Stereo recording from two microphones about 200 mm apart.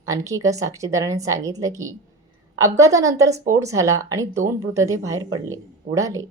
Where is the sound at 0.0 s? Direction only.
15° right (ahead or behind).